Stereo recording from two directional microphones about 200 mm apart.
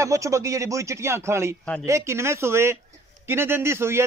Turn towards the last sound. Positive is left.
turn(degrees=-15)  # may be behind; listen again after turning